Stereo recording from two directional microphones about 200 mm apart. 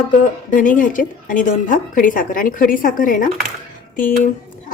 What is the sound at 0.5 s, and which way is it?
A woman's voice, 40° left (ahead or behind).